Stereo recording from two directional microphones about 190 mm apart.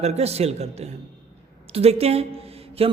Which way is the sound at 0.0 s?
35° right (ahead or behind).